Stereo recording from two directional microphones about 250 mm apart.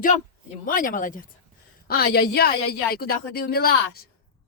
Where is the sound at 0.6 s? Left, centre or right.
Left.